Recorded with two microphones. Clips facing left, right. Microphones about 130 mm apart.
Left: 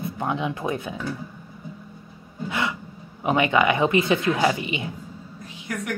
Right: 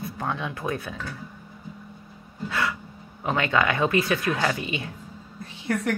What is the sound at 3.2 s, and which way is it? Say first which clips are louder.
Speech: left 4 dB; 15° left (ahead or behind).